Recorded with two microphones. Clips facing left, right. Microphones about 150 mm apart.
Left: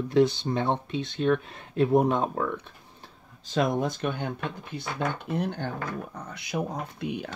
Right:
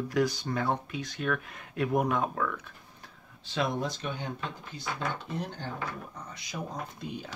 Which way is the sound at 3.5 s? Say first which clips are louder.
Left 5 dB; 50° left (ahead or behind).